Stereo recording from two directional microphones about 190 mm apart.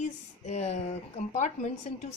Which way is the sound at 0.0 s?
40° left (ahead or behind).